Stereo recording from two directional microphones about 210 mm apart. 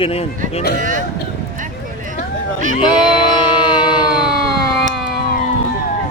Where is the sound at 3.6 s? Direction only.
20° left (ahead or behind).